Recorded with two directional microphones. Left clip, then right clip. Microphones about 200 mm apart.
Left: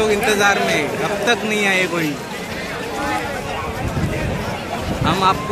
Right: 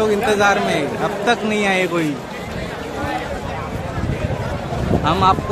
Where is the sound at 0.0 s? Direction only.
30° right (ahead or behind).